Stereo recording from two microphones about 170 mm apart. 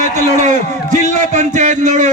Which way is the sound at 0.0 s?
45° right (ahead or behind).